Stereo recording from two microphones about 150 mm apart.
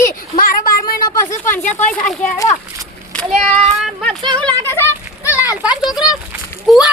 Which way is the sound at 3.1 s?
5° left (ahead or behind).